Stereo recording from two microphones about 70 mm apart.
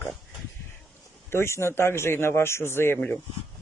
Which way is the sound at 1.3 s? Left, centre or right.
Left.